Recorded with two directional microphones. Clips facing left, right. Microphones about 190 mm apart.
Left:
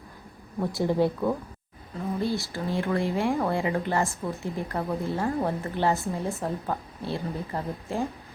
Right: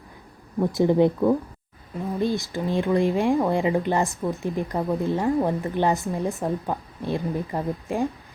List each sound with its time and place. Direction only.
0.6 s speech: 15° right (ahead or behind)